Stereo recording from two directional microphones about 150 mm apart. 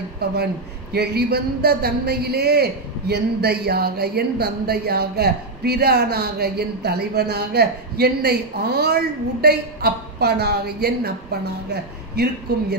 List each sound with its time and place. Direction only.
0.2 s a man's voice: 90° right